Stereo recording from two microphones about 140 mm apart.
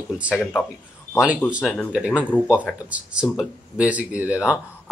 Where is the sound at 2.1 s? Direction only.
10° left (ahead or behind).